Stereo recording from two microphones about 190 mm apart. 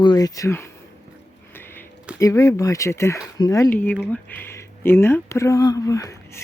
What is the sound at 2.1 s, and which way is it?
Speech, 15° left (ahead or behind).